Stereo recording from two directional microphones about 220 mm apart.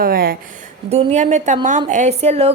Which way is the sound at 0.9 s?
30° right (ahead or behind).